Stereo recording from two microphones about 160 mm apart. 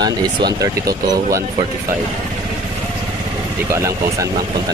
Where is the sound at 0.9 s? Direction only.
70° right (ahead or behind).